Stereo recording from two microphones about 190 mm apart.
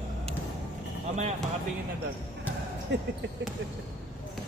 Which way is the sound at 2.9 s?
65° right (ahead or behind).